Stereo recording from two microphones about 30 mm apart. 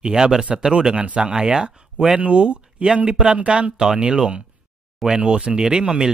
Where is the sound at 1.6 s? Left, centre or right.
Right.